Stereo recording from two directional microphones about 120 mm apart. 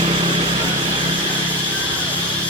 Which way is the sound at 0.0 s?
50° right (ahead or behind).